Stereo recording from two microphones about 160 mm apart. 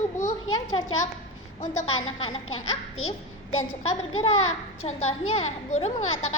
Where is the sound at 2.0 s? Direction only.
35° left (ahead or behind).